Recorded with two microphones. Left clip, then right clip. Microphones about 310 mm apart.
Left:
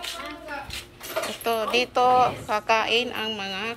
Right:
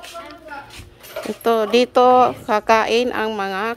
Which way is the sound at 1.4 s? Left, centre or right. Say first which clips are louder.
Right 9 dB; right.